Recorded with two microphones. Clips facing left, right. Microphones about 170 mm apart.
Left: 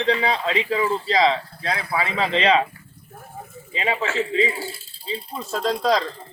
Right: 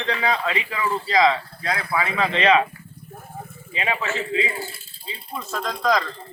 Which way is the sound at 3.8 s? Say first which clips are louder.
Left 2 dB; 30° left (ahead or behind).